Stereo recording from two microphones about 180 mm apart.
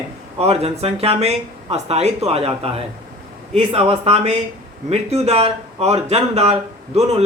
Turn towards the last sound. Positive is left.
turn(degrees=-35)  # may be behind; listen again after turning